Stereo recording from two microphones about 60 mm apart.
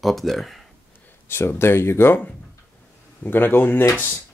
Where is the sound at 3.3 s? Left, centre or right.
Left.